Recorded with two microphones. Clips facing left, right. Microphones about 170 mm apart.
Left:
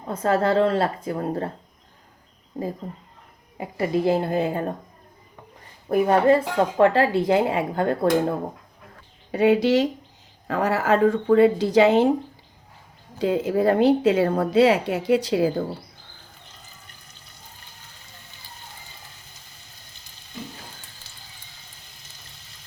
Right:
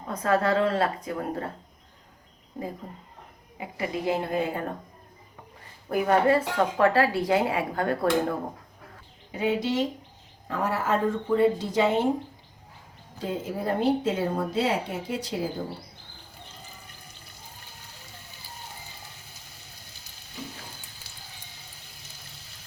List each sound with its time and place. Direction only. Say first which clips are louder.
0.1 s speech: left 3 dB; 30° left (ahead or behind)
3.6 s a woman's voice: left 7 dB; 40° left (ahead or behind)
5.9 s speech: left 4 dB; 25° left (ahead or behind)
9.3 s a woman's voice: left 8 dB; 75° left (ahead or behind)
13.1 s a woman's voice: left 10 dB; 85° left